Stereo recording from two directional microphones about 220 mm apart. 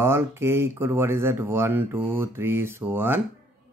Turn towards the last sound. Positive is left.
turn(degrees=-10)  # may be behind; listen again after turning